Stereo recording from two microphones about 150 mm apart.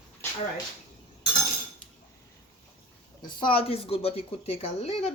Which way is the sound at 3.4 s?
35° left (ahead or behind).